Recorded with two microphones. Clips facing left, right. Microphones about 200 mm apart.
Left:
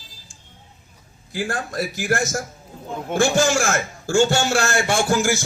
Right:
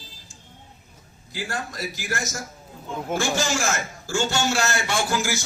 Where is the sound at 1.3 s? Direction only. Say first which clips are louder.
Left 5 dB; 50° left (ahead or behind).